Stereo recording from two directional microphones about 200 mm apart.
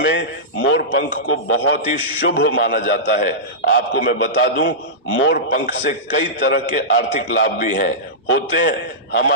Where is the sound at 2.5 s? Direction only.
50° left (ahead or behind).